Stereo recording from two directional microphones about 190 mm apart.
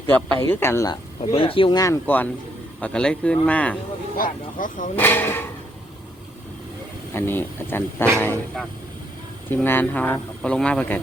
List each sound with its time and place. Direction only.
0.1 s speech: 10° left (ahead or behind)
1.2 s speech: 30° left (ahead or behind); by 3.8 s 5° left (ahead or behind)
4.2 s speech: 45° left (ahead or behind)
4.9 s speech: 10° left (ahead or behind)
7.1 s speech: 10° left (ahead or behind)
9.5 s speech: 10° left (ahead or behind)